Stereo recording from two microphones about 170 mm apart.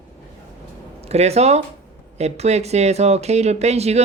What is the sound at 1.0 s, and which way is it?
Speech, 40° right (ahead or behind).